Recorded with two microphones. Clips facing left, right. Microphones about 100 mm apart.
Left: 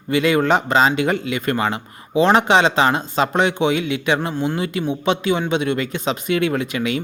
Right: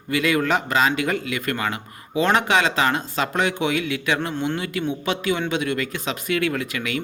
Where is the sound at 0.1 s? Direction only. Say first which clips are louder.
Left 4 dB; 25° left (ahead or behind).